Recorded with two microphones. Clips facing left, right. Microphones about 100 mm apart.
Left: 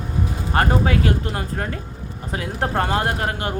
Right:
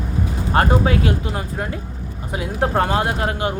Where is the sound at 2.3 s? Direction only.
20° right (ahead or behind).